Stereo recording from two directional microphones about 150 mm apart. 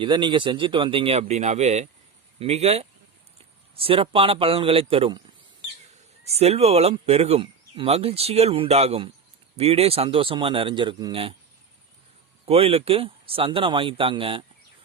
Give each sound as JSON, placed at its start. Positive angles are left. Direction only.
{"t": 0.0, "sound": "speech", "side_deg": -30}
{"t": 6.2, "sound": "speech", "side_deg": -45}
{"t": 12.5, "sound": "speech", "side_deg": -40}